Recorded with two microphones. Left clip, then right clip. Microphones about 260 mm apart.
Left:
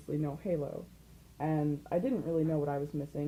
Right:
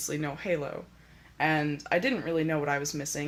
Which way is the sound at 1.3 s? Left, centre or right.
Right.